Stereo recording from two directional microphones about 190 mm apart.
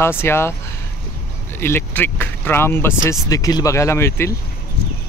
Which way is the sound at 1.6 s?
10° left (ahead or behind).